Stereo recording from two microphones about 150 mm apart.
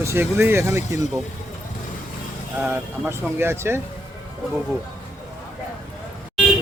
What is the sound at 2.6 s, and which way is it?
Speech, 15° right (ahead or behind).